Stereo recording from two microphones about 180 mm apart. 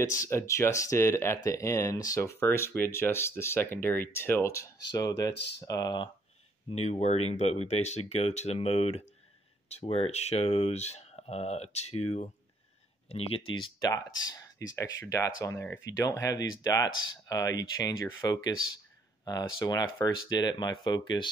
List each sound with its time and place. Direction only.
0.0 s speech: 15° left (ahead or behind)
6.7 s speech: 40° left (ahead or behind)
13.6 s speech: 20° left (ahead or behind)